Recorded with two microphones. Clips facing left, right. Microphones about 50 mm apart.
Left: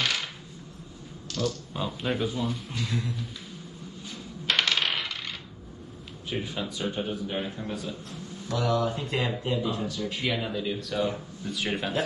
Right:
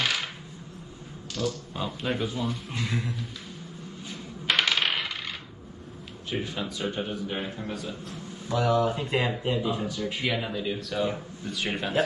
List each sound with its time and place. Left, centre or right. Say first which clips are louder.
0.0 s coin: right 1 dB; centre
1.3 s speech: even; centre
2.7 s speech: right 1 dB; right
4.1 s coin: right 1 dB; centre
6.4 s speech: even; centre